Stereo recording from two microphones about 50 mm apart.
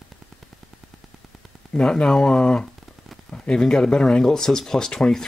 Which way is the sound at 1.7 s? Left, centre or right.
Centre.